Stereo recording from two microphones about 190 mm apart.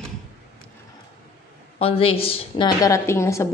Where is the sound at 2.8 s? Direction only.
15° left (ahead or behind).